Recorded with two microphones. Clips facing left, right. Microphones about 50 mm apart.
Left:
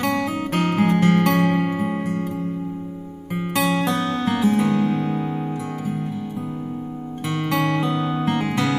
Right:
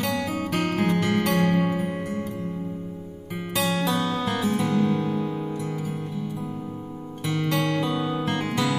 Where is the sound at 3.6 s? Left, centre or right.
Centre.